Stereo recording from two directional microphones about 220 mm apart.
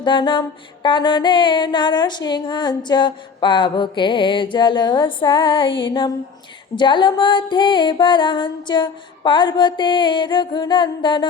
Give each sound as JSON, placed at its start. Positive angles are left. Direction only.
{"t": 0.0, "sound": "music", "side_deg": 20}